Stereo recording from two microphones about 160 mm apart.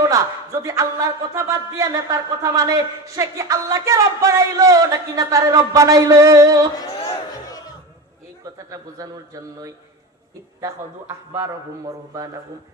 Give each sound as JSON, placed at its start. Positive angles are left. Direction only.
{"t": 0.0, "sound": "speech", "side_deg": -20}
{"t": 6.7, "sound": "a sound", "side_deg": 30}
{"t": 8.5, "sound": "a man's voice", "side_deg": -20}